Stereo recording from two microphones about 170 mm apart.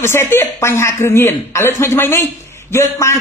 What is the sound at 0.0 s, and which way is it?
A man's voice, 15° left (ahead or behind).